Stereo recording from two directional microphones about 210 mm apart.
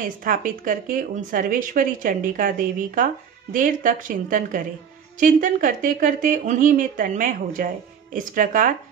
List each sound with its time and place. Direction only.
0.0 s speech: 40° right (ahead or behind)